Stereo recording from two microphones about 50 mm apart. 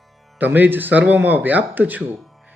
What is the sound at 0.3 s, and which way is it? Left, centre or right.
Speech, right.